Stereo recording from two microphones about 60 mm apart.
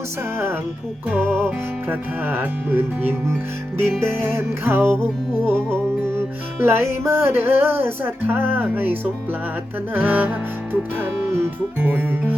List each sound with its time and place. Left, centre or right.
1.2 s music: centre
1.5 s music: right
11.8 s music: right